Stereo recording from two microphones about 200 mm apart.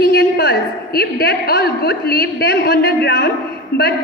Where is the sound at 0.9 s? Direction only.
50° left (ahead or behind).